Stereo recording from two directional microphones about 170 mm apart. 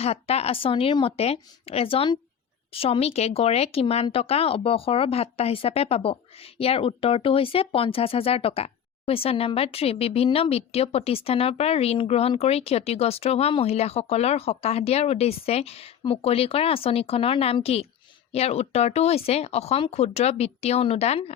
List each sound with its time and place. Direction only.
0.0 s speech: 35° left (ahead or behind)